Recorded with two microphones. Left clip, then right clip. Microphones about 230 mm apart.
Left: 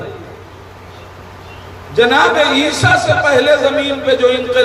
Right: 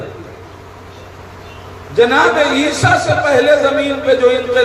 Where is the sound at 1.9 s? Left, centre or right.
Left.